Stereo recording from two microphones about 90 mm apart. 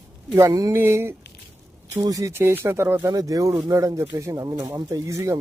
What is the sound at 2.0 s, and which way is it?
Speech, 45° right (ahead or behind).